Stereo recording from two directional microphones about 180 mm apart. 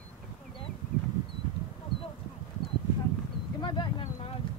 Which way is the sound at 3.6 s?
25° left (ahead or behind).